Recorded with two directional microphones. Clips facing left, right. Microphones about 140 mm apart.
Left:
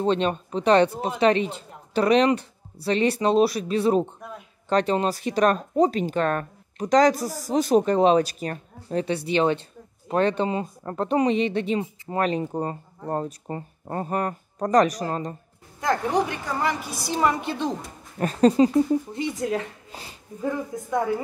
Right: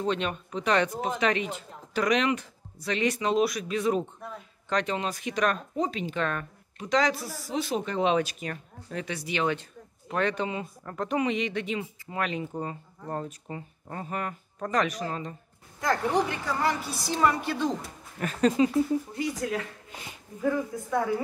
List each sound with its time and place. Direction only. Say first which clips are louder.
0.0 s speech: left 6 dB; 35° left (ahead or behind)
15.8 s speech: left 3 dB; 20° left (ahead or behind)
18.2 s speech: left 6 dB; 35° left (ahead or behind)
20.4 s speech: even; 20° left (ahead or behind)